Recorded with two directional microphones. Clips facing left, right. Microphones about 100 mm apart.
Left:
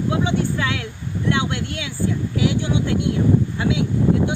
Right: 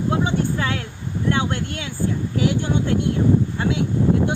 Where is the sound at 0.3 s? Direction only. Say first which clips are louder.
Even; 35° right (ahead or behind).